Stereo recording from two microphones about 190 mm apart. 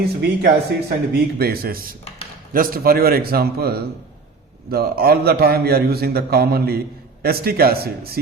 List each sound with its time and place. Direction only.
0.0 s a man's voice: 60° right (ahead or behind)